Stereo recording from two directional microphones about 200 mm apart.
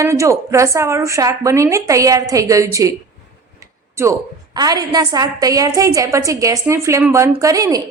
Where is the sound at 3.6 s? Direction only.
15° right (ahead or behind).